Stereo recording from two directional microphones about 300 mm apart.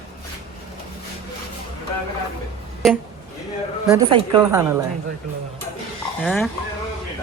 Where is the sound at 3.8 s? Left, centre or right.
Centre.